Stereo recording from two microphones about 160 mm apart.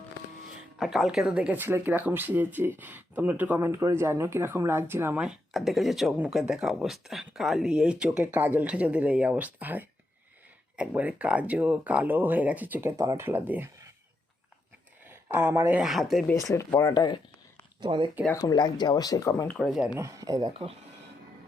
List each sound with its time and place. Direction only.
0.8 s speech: centre (ahead or behind)
15.1 s speech: 15° right (ahead or behind)
15.8 s speech: centre (ahead or behind)
16.3 s speech: 20° left (ahead or behind)
17.7 s speech: 30° right (ahead or behind)
18.3 s speech: 25° left (ahead or behind)
19.5 s speech: centre (ahead or behind)
20.0 s speech: 20° right (ahead or behind)
20.5 s speech: 35° right (ahead or behind)